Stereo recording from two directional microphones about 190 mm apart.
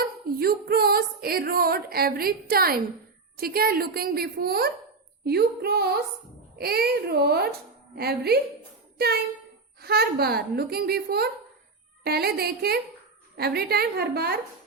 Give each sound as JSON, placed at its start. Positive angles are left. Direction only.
{"t": 0.0, "sound": "music", "side_deg": -55}
{"t": 5.2, "sound": "speech", "side_deg": -55}
{"t": 9.8, "sound": "speech", "side_deg": -55}